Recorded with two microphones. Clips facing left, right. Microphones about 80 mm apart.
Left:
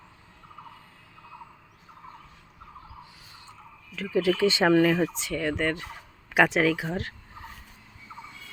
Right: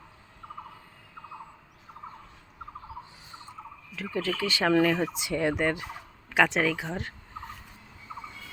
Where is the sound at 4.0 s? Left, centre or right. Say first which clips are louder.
Left 2 dB; centre.